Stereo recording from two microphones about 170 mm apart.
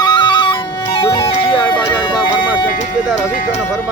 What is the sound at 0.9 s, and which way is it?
Speech, 30° left (ahead or behind).